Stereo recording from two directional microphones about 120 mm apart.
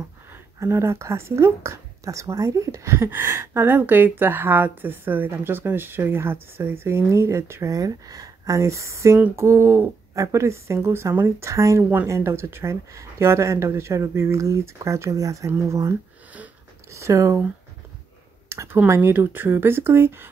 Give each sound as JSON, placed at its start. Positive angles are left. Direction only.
{"t": 0.3, "sound": "speech", "side_deg": -25}
{"t": 16.9, "sound": "speech", "side_deg": -25}
{"t": 18.5, "sound": "speech", "side_deg": -20}